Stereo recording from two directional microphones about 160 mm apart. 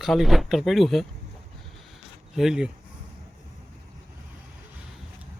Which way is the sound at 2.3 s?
5° right (ahead or behind).